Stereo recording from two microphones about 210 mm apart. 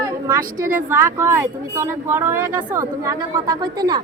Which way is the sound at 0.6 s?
10° right (ahead or behind).